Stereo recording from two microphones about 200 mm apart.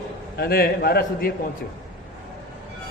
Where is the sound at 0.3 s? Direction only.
50° left (ahead or behind).